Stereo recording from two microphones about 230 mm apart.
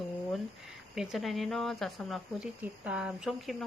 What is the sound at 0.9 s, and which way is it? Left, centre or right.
Speech, centre.